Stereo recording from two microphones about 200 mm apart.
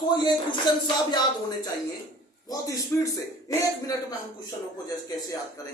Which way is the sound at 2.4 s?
15° left (ahead or behind).